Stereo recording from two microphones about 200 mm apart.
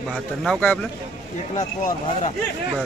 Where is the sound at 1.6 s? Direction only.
35° left (ahead or behind).